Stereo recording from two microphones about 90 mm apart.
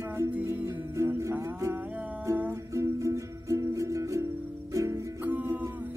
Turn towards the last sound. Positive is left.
turn(degrees=-20)  # may be behind; listen again after turning